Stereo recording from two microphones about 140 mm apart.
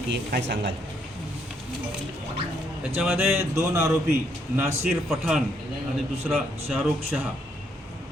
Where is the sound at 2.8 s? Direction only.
5° right (ahead or behind).